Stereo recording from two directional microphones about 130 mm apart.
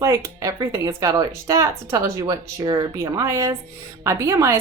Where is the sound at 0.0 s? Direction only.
20° right (ahead or behind).